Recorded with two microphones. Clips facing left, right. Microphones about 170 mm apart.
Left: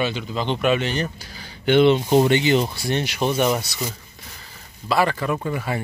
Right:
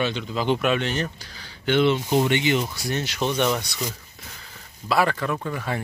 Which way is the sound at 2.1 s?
35° left (ahead or behind).